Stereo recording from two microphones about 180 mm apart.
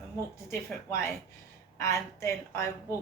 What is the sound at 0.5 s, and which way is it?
A woman's voice, 15° left (ahead or behind).